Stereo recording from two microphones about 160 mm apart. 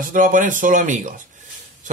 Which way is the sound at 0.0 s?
55° right (ahead or behind).